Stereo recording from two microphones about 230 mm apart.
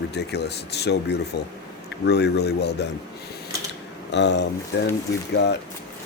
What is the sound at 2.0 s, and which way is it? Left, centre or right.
Speech, left.